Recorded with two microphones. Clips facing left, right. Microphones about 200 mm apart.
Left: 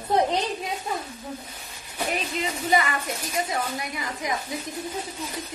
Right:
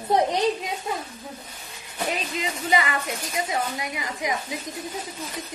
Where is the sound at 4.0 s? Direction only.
15° right (ahead or behind).